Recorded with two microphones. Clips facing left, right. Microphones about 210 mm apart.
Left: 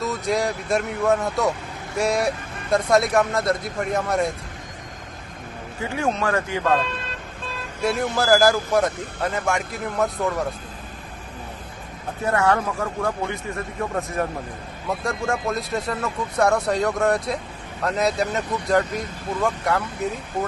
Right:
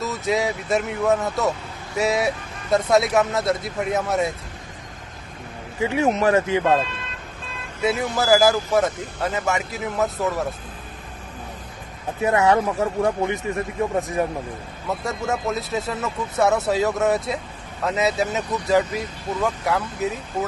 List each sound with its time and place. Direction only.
0.0 s speech: centre (ahead or behind)
5.8 s speech: 20° right (ahead or behind)
7.8 s speech: centre (ahead or behind)
12.2 s speech: 20° right (ahead or behind)
14.8 s speech: 5° right (ahead or behind)